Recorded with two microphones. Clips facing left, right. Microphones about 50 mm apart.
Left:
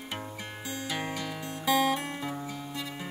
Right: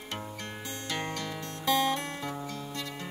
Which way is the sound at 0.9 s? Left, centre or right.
Centre.